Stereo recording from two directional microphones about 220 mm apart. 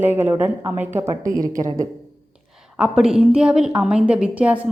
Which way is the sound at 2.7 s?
5° right (ahead or behind).